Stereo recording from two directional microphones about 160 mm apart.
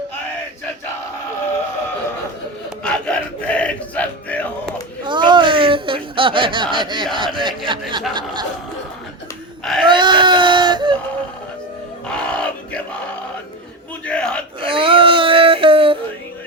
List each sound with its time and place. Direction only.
2.8 s music: 5° left (ahead or behind)
5.0 s a sound: 30° right (ahead or behind)
7.3 s speech: 30° right (ahead or behind)
9.8 s baby cry: 30° right (ahead or behind)
12.0 s crowd: 5° left (ahead or behind)
14.0 s battle cry: 5° left (ahead or behind)
14.6 s a sound: 35° right (ahead or behind)